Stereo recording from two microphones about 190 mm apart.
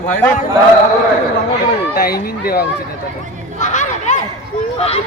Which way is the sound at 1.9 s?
50° left (ahead or behind).